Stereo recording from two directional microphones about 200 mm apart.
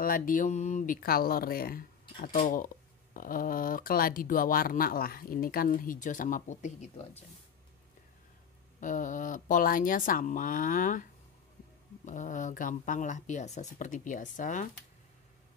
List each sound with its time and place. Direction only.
0.0 s speech: 45° left (ahead or behind)
8.8 s speech: 40° left (ahead or behind)